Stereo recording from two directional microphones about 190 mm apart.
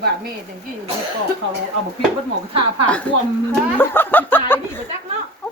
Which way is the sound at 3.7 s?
10° left (ahead or behind).